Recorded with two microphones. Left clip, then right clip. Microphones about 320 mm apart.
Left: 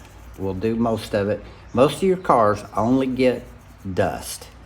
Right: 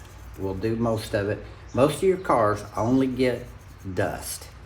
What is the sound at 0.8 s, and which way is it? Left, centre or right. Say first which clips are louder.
Speech: left 3 dB; left.